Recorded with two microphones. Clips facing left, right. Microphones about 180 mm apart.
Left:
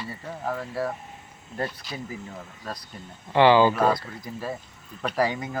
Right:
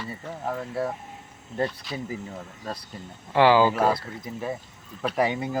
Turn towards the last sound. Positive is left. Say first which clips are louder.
# right 1 dB
turn(degrees=-30)  # may be behind; listen again after turning